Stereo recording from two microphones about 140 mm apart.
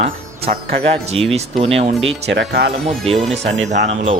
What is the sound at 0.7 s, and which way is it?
Speech, 45° right (ahead or behind).